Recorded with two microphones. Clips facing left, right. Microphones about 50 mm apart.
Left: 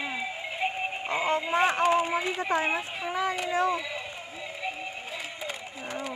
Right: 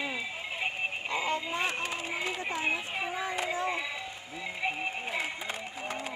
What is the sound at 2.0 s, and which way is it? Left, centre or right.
Speech, centre.